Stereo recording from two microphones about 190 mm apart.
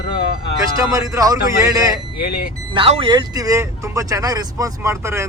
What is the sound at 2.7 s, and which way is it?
Speech, 30° right (ahead or behind).